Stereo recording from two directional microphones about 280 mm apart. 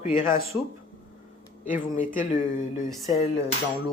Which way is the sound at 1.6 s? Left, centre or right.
Left.